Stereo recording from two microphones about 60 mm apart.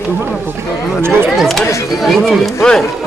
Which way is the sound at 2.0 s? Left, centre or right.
Centre.